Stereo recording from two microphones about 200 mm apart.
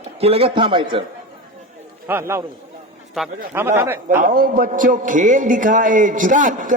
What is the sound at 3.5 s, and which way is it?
Speech, 10° right (ahead or behind).